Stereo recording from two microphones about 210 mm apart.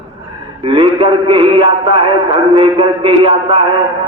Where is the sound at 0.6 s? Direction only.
25° right (ahead or behind).